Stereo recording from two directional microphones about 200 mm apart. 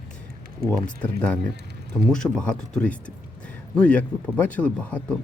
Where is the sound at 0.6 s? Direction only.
45° right (ahead or behind).